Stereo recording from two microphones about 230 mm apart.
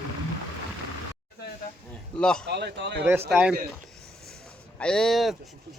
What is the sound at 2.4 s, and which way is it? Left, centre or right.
Speech, right.